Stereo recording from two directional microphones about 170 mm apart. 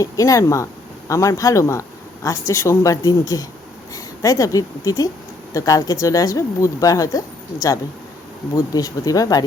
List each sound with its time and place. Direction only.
0.0 s speech: 20° left (ahead or behind)
8.5 s speech: 20° left (ahead or behind)